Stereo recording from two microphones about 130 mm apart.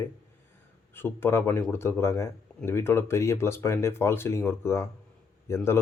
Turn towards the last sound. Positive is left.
turn(degrees=20)  # may be behind; listen again after turning